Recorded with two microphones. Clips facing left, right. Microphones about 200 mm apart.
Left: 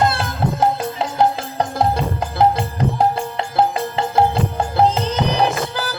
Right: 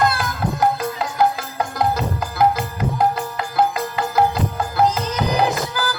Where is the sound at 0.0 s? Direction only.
30° left (ahead or behind).